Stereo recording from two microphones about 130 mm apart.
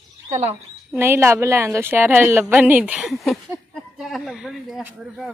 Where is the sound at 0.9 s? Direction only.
20° right (ahead or behind).